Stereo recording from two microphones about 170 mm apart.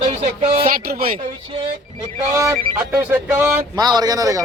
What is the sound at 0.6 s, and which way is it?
Speech, 60° right (ahead or behind).